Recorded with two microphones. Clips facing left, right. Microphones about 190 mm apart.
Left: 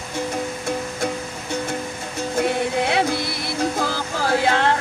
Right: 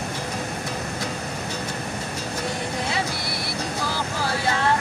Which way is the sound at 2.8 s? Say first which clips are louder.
Left 7 dB; 65° left (ahead or behind).